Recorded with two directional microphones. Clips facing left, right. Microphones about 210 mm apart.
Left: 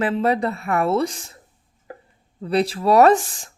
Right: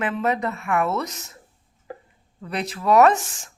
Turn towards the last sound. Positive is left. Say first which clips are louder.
# left 3 dB
turn(degrees=35)  # may be behind; listen again after turning